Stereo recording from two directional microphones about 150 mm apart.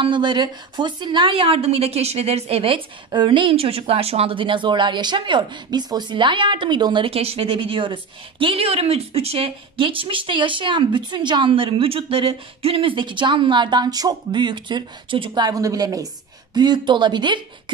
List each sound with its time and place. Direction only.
0.0 s a woman's voice: 30° right (ahead or behind)